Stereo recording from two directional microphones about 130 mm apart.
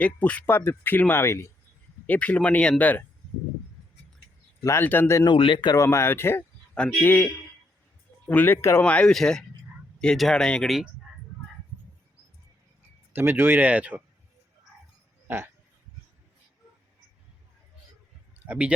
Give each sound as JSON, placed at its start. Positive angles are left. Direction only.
{"t": 0.0, "sound": "speech", "side_deg": 10}
{"t": 4.6, "sound": "speech", "side_deg": 20}
{"t": 5.2, "sound": "speech", "side_deg": 40}
{"t": 5.7, "sound": "speech", "side_deg": 20}
{"t": 8.3, "sound": "speech", "side_deg": 15}
{"t": 13.1, "sound": "speech", "side_deg": -15}
{"t": 15.3, "sound": "speech", "side_deg": -15}
{"t": 18.4, "sound": "speech", "side_deg": -10}